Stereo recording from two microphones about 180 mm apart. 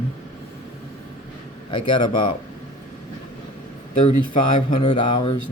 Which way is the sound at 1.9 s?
30° left (ahead or behind).